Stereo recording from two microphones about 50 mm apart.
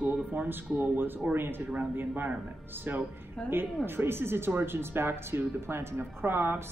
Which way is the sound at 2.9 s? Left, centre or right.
Right.